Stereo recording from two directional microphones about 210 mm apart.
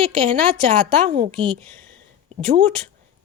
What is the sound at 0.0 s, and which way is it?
Speech, 20° right (ahead or behind).